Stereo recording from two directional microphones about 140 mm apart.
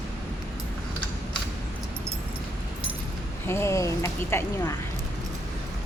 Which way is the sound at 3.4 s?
20° left (ahead or behind).